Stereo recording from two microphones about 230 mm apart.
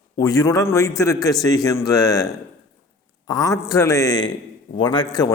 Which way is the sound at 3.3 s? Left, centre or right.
Centre.